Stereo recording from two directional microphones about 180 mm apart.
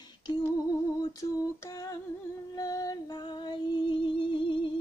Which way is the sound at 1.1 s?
20° left (ahead or behind).